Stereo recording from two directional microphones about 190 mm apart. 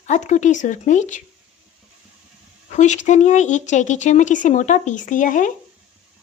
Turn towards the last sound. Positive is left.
turn(degrees=45)  # may be behind; listen again after turning